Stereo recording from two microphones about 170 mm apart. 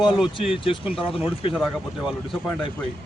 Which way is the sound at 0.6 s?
30° left (ahead or behind).